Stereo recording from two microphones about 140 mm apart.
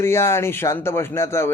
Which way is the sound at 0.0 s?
20° left (ahead or behind).